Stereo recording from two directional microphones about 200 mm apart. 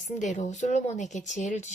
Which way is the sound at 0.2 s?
35° left (ahead or behind).